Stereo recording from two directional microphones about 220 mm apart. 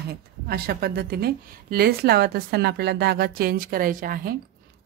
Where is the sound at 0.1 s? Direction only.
45° right (ahead or behind).